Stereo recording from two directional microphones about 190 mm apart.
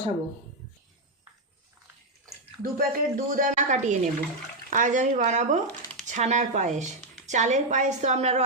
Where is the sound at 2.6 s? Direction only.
50° right (ahead or behind).